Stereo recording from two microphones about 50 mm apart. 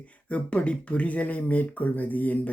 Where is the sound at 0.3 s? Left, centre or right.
Left.